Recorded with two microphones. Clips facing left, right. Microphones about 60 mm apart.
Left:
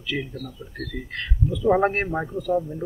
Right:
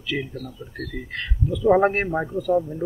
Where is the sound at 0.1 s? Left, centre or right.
Centre.